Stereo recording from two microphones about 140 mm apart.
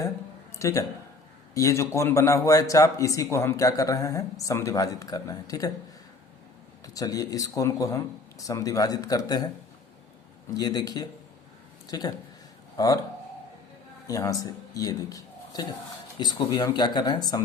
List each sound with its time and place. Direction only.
0.5 s a man's voice: 20° left (ahead or behind)
6.8 s a man's voice: 25° left (ahead or behind)
10.5 s a man's voice: 25° left (ahead or behind)
14.1 s a man's voice: 25° left (ahead or behind)